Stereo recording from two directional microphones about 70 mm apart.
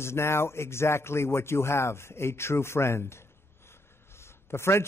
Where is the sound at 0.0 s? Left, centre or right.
Left.